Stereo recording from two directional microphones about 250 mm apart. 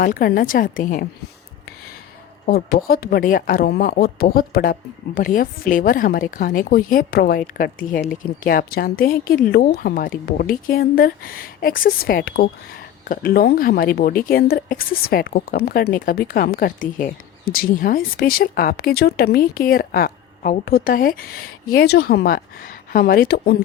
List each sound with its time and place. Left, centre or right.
0.0 s a woman's voice: left
2.5 s a woman's voice: left